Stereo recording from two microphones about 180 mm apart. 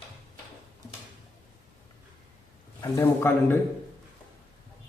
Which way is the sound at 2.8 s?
15° left (ahead or behind).